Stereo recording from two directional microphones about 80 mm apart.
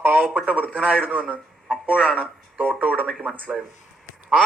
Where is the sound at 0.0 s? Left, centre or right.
Right.